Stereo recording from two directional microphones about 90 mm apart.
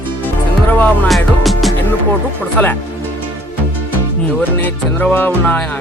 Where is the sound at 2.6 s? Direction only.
20° left (ahead or behind).